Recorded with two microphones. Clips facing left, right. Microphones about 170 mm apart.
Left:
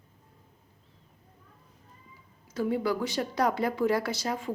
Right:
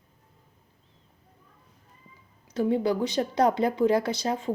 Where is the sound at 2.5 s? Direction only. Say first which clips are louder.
Right 4 dB; 25° right (ahead or behind).